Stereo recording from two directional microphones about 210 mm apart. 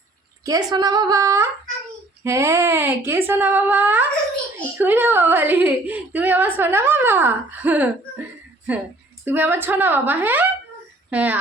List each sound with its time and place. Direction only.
0.4 s a woman's voice: 20° right (ahead or behind)
9.2 s a woman's voice: 10° right (ahead or behind)